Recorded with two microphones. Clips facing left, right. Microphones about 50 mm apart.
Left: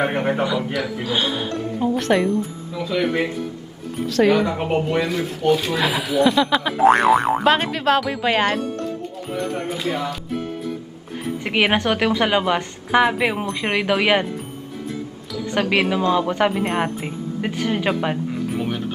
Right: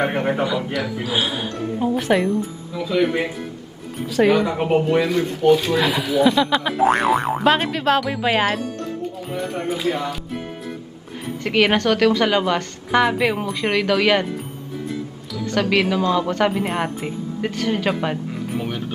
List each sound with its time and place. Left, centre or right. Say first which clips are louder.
0.0 s speech: even; centre
11.4 s speech: right 2 dB; centre
15.4 s speech: right 1 dB; centre